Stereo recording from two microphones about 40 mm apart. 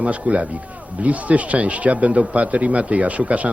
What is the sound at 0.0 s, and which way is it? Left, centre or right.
Speech, right.